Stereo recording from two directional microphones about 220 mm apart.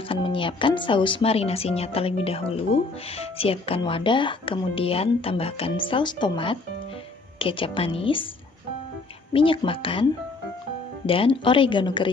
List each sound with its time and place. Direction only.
0.1 s speech: 25° left (ahead or behind)
9.3 s speech: 25° left (ahead or behind)
11.1 s speech: 25° left (ahead or behind)